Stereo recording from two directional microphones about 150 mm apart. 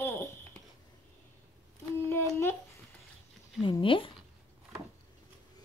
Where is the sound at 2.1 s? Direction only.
15° left (ahead or behind).